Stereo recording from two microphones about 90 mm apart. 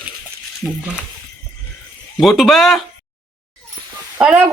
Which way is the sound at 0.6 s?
15° right (ahead or behind).